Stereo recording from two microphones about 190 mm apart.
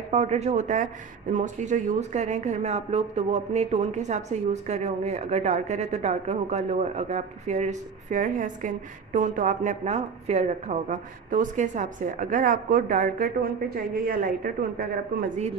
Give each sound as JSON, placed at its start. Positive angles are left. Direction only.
{"t": 0.1, "sound": "speech", "side_deg": -35}